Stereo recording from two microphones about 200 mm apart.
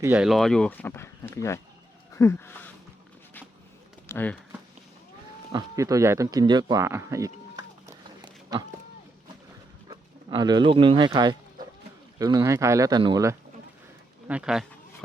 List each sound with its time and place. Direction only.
0.0 s speech: 5° right (ahead or behind); by 2.7 s 10° left (ahead or behind)
4.1 s speech: 10° left (ahead or behind)
5.5 s speech: 15° right (ahead or behind)
9.9 s speech: 25° right (ahead or behind)
14.3 s speech: 5° right (ahead or behind)